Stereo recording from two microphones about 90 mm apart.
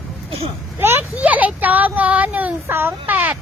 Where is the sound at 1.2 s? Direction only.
15° right (ahead or behind).